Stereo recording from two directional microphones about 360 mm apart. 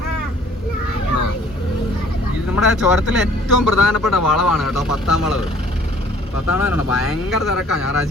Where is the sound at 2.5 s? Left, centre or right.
Centre.